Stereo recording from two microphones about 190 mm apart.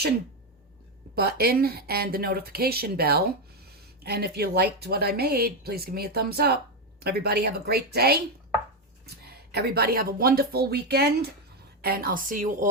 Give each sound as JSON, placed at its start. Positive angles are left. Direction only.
{"t": 1.1, "sound": "speech", "side_deg": -55}